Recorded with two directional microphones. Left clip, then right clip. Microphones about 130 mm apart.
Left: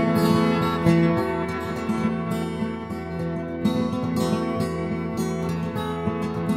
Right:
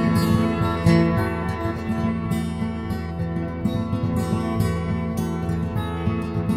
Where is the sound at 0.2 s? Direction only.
15° left (ahead or behind).